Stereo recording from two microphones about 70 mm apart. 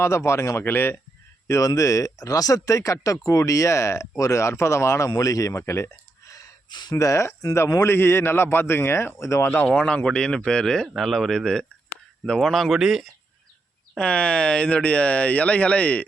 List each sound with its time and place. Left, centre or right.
0.0 s a man's voice: left
1.5 s speech: left
5.1 s speech: left
6.7 s speech: left
6.9 s a man's voice: left
9.6 s speech: centre
13.9 s speech: centre